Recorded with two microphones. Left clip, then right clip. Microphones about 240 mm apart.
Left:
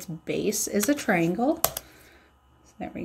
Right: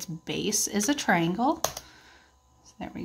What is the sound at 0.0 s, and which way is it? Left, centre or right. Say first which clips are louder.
Speech: left 3 dB; centre.